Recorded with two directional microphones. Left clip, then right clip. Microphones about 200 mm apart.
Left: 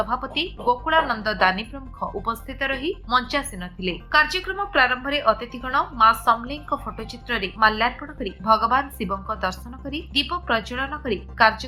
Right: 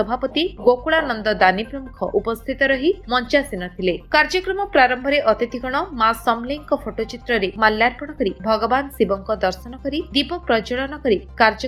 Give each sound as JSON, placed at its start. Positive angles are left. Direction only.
{"t": 0.0, "sound": "a woman's voice", "side_deg": -15}